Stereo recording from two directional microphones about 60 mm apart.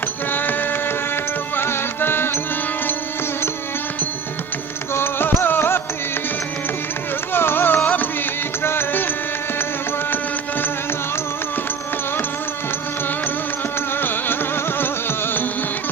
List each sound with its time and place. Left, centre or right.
0.3 s a sound: left
1.5 s music: left
4.9 s music: left
7.3 s music: left
14.0 s music: left